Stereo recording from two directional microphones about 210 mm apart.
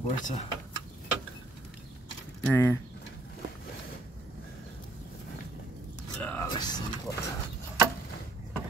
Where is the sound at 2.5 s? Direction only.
10° left (ahead or behind).